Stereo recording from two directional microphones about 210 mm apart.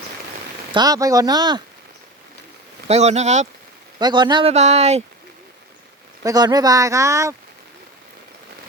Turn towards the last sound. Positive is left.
turn(degrees=-15)  # may be behind; listen again after turning